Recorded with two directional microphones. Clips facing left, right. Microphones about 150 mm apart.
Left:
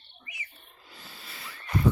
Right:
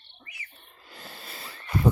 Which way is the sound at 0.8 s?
55° right (ahead or behind).